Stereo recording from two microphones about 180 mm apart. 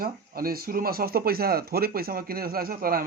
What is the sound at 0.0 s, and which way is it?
A man's voice, 55° right (ahead or behind).